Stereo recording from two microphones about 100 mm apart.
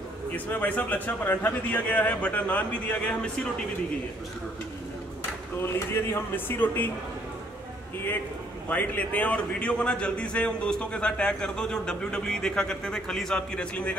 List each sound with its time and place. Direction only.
0.5 s a man's voice: 15° left (ahead or behind)
5.6 s speech: 25° left (ahead or behind)
8.6 s a man's voice: 15° left (ahead or behind)